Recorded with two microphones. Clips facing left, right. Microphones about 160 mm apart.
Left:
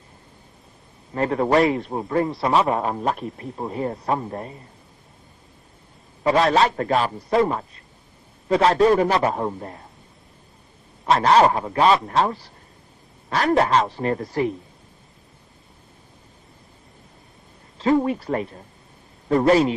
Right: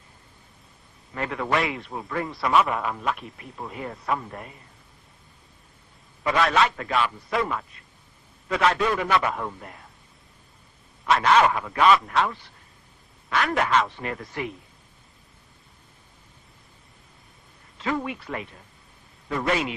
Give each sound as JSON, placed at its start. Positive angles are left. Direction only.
{"t": 1.1, "sound": "a man's voice", "side_deg": 35}
{"t": 6.2, "sound": "a man's voice", "side_deg": 30}
{"t": 11.0, "sound": "a man's voice", "side_deg": 35}
{"t": 17.7, "sound": "a man's voice", "side_deg": 35}